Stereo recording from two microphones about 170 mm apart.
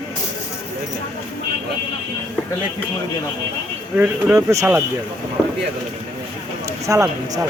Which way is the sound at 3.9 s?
10° right (ahead or behind).